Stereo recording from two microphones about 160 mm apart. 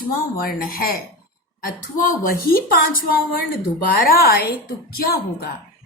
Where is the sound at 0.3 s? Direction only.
70° left (ahead or behind).